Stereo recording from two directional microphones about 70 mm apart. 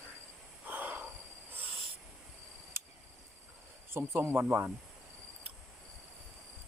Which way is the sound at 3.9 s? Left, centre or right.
Right.